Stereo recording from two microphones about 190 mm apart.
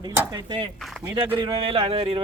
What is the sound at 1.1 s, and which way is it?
Speech, 25° right (ahead or behind).